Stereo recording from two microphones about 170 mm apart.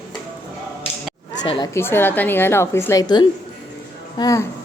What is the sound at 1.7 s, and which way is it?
A woman's voice, 15° left (ahead or behind).